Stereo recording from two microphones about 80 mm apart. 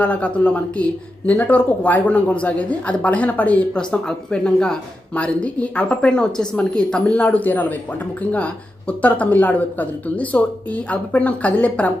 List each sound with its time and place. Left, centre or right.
0.0 s speech: centre